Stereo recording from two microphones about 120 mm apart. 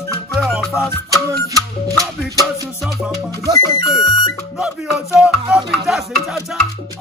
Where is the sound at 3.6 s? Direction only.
35° left (ahead or behind).